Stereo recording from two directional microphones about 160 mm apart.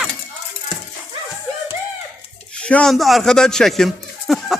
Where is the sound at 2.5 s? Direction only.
5° left (ahead or behind).